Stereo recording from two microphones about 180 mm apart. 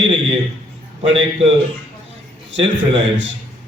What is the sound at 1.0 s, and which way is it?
Speech, 30° right (ahead or behind).